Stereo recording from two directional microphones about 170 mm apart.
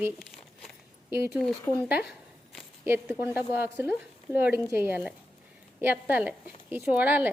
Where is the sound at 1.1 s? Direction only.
15° right (ahead or behind).